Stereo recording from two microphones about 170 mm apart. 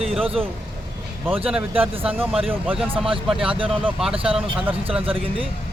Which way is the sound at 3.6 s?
30° right (ahead or behind).